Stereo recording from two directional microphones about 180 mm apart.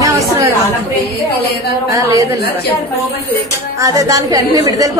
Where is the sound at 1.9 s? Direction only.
20° right (ahead or behind).